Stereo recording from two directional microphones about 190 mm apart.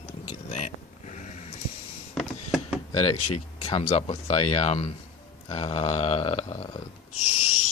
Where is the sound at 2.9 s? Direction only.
30° left (ahead or behind).